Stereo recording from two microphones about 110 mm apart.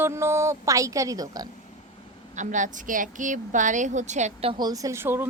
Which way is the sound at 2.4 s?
90° right.